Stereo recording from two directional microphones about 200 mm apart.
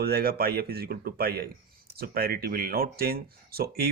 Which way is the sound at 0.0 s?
50° right (ahead or behind).